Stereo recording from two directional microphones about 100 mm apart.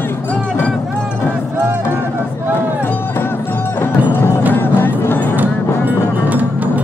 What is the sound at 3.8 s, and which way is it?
Music, 20° left (ahead or behind).